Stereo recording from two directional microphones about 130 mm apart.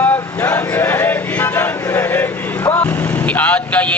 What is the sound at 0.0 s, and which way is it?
Vehicle, 15° left (ahead or behind).